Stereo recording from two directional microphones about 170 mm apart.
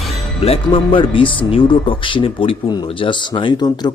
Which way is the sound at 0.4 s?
35° left (ahead or behind).